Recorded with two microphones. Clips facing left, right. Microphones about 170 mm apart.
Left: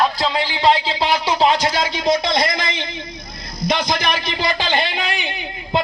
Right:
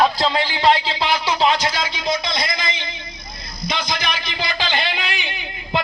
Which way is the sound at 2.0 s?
65° left (ahead or behind).